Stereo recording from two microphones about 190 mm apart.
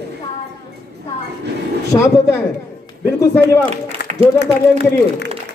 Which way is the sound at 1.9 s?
20° left (ahead or behind).